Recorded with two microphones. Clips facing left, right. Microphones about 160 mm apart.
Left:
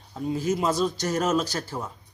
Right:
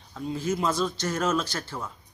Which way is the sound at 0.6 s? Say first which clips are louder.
Left 2 dB; 40° left (ahead or behind).